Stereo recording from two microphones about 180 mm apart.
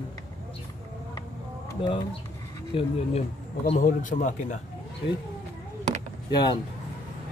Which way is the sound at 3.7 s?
45° left (ahead or behind).